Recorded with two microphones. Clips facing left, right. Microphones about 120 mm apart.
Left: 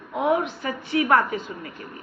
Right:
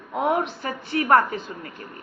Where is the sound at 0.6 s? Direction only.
35° right (ahead or behind).